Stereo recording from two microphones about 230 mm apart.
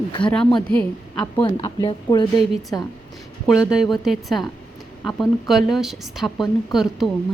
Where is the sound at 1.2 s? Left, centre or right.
Centre.